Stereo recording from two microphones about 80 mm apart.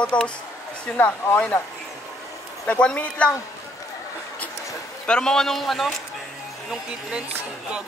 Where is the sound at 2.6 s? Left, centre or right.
Centre.